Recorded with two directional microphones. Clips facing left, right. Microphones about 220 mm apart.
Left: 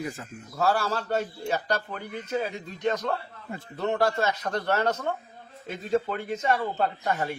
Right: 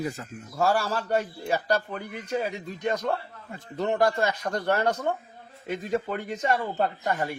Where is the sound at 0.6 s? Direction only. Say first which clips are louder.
Right 1 dB; 15° right (ahead or behind).